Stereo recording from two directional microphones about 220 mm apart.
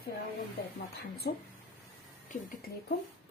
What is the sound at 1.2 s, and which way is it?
Speech, 45° left (ahead or behind).